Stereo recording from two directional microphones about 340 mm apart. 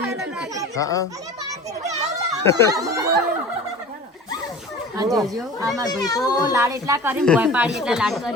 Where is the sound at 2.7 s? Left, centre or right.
Centre.